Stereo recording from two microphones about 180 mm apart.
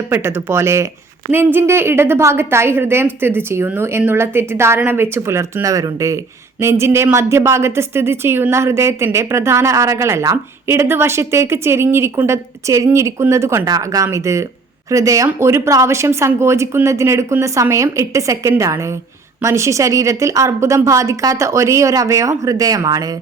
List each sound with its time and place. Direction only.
0.1 s a woman's voice: 15° right (ahead or behind)